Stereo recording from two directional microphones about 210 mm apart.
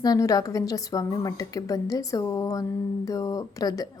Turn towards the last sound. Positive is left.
turn(degrees=15)  # may be behind; listen again after turning